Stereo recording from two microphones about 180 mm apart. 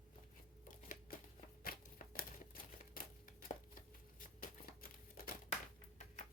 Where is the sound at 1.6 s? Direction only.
50° left (ahead or behind).